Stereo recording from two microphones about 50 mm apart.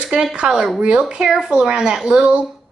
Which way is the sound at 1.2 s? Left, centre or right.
Centre.